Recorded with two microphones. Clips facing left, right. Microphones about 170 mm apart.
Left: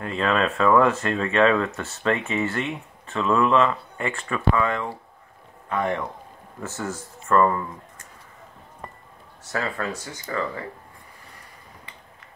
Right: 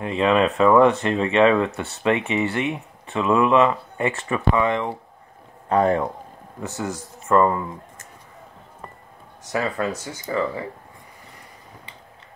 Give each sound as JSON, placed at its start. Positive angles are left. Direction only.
{"t": 0.0, "sound": "speech", "side_deg": -15}
{"t": 5.7, "sound": "a man's voice", "side_deg": -35}
{"t": 6.6, "sound": "speech", "side_deg": -15}
{"t": 9.4, "sound": "speech", "side_deg": -15}